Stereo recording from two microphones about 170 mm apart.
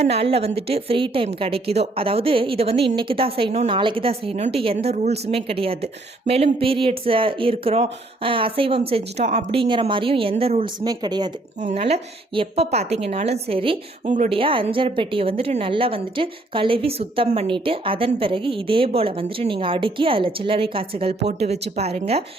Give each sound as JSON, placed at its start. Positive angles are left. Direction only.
{"t": 0.0, "sound": "a woman's voice", "side_deg": -35}
{"t": 10.8, "sound": "speech", "side_deg": -25}
{"t": 11.6, "sound": "a woman's voice", "side_deg": -40}
{"t": 14.0, "sound": "speech", "side_deg": -45}
{"t": 14.3, "sound": "a woman's voice", "side_deg": -30}